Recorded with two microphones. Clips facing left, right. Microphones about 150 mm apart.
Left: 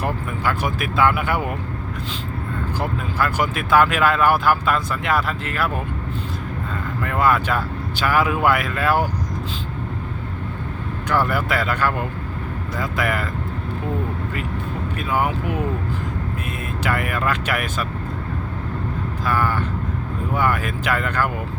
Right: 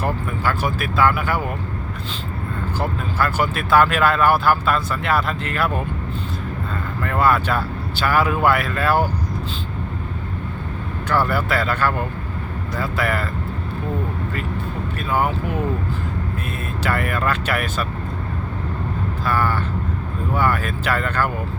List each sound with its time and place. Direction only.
0.0 s speech: 15° left (ahead or behind)
2.8 s speech: 15° left (ahead or behind)
7.0 s speech: 10° left (ahead or behind)
11.1 s speech: 15° left (ahead or behind)
15.1 s speech: 10° left (ahead or behind)
16.8 s speech: 10° left (ahead or behind)
19.2 s vehicle: 15° left (ahead or behind)
20.3 s speech: 15° left (ahead or behind)